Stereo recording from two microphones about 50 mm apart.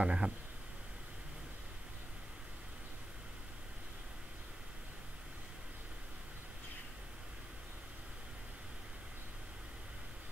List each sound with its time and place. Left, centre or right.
0.0 s speech: right